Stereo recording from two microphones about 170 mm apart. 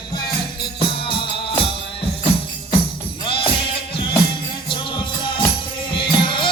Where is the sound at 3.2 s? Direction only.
30° left (ahead or behind).